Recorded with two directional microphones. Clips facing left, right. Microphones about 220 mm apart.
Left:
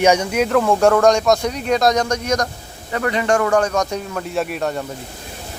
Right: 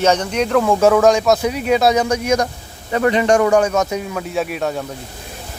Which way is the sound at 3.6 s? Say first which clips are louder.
Right 2 dB; 5° right (ahead or behind).